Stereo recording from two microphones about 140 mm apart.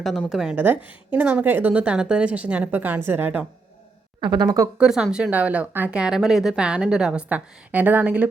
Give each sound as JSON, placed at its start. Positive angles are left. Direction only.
{"t": 0.0, "sound": "a woman's voice", "side_deg": 0}
{"t": 0.5, "sound": "a woman's voice", "side_deg": -15}
{"t": 4.2, "sound": "a woman's voice", "side_deg": -30}
{"t": 4.8, "sound": "a woman's voice", "side_deg": -5}